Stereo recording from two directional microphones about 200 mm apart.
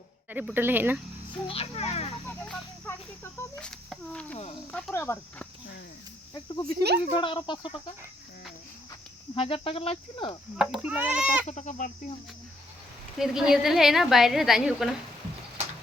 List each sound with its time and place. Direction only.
0.3 s speech: 10° right (ahead or behind)
1.5 s cricket: 30° left (ahead or behind)
3.3 s a woman's voice: 15° left (ahead or behind)
6.3 s cricket: 20° left (ahead or behind)
6.7 s speech: 55° right (ahead or behind)
7.1 s cricket: 25° left (ahead or behind)
9.3 s cricket: 30° left (ahead or behind)
10.6 s speech: 5° right (ahead or behind)
11.4 s speech: 35° left (ahead or behind)
13.1 s a woman's voice: centre (ahead or behind)